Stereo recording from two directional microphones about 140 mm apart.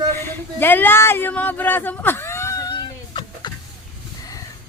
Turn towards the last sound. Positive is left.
turn(degrees=35)  # may be behind; listen again after turning